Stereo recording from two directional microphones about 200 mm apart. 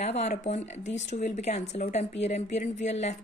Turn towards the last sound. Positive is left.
turn(degrees=35)  # may be behind; listen again after turning